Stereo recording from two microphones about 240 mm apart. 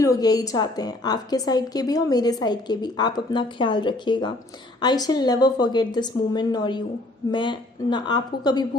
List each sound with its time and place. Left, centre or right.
0.0 s a woman's voice: centre